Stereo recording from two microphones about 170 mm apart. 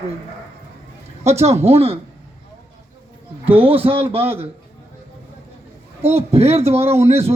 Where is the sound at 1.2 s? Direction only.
40° right (ahead or behind).